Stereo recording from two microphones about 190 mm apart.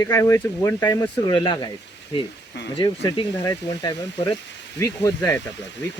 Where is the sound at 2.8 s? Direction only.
25° left (ahead or behind).